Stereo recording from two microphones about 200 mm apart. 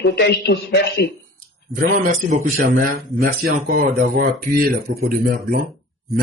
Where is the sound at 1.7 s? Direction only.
45° right (ahead or behind).